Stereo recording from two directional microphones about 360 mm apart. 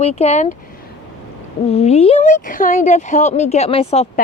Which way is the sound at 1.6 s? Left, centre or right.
Centre.